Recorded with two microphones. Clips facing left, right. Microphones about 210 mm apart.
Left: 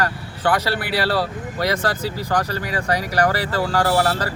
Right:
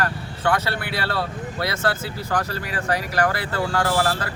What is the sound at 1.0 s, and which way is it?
Speech, 35° left (ahead or behind).